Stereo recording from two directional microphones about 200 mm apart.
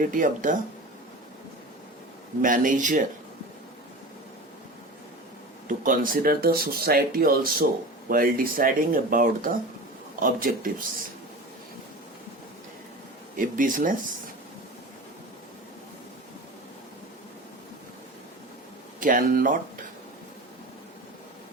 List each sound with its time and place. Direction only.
0.0 s speech: 40° right (ahead or behind)
2.4 s speech: 40° right (ahead or behind)
5.6 s speech: 40° right (ahead or behind)
13.3 s speech: 40° right (ahead or behind)
18.9 s speech: 40° right (ahead or behind)